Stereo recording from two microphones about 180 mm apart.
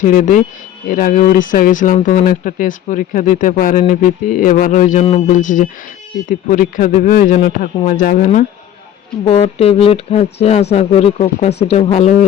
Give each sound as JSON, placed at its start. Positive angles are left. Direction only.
{"t": 0.0, "sound": "speech", "side_deg": 45}
{"t": 9.2, "sound": "speech", "side_deg": 35}